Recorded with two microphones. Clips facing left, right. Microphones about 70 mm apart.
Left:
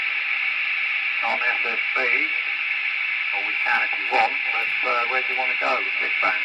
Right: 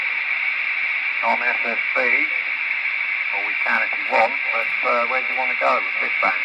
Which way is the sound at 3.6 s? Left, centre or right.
Right.